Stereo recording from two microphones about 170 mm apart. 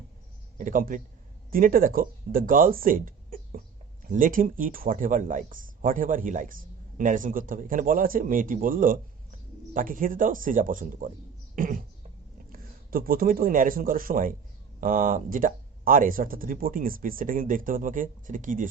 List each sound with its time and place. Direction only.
0.6 s speech: 55° right (ahead or behind)
11.5 s beatboxing: 55° right (ahead or behind)
12.5 s speech: 60° right (ahead or behind)